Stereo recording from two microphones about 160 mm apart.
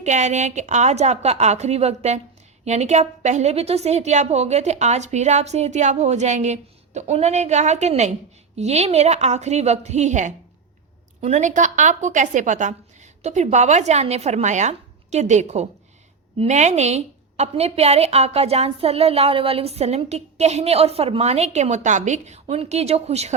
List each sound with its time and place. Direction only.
0.0 s a woman's voice: 45° right (ahead or behind)